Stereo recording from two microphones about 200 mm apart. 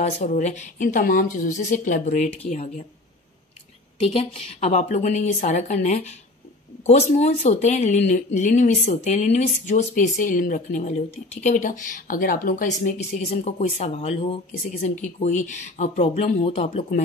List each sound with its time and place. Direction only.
0.0 s speech: 35° left (ahead or behind)
4.0 s speech: 30° left (ahead or behind)